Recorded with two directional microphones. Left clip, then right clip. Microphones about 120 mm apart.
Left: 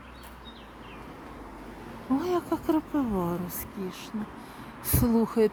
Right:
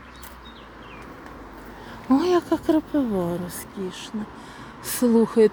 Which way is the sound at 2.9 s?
10° right (ahead or behind).